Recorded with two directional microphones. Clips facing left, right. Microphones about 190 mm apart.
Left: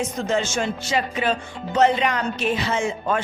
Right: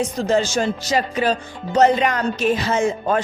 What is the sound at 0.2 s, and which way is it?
Speech, 35° right (ahead or behind).